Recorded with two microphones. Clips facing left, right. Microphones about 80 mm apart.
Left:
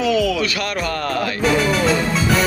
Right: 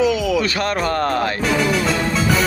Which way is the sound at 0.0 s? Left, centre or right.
Centre.